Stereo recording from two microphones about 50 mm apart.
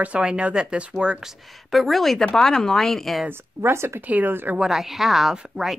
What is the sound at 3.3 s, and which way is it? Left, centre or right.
Speech, right.